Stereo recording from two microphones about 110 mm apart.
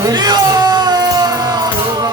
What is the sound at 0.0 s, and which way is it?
Music, 40° right (ahead or behind).